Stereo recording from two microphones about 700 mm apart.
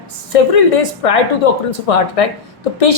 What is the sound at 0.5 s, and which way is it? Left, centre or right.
A woman's voice, left.